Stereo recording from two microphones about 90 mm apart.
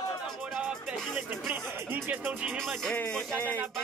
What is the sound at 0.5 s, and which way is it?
Music, 10° right (ahead or behind).